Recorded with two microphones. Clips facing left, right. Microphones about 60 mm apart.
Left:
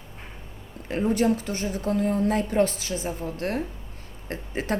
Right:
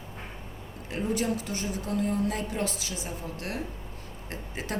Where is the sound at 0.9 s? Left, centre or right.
Left.